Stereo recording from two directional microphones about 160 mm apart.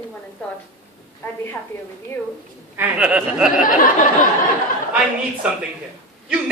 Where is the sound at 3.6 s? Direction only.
55° left (ahead or behind).